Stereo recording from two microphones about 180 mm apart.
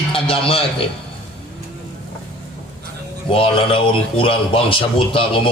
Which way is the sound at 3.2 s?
30° left (ahead or behind).